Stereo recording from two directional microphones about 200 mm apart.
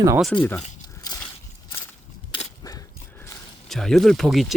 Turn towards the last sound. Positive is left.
turn(degrees=0)  # may be behind; listen again after turning